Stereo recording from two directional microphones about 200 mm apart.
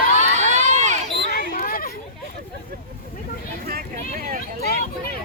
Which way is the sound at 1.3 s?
45° left (ahead or behind).